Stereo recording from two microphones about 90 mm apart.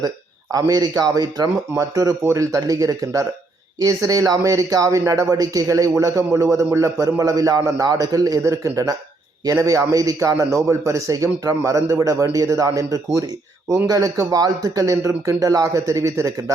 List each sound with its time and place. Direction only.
0.5 s a man's voice: 45° right (ahead or behind)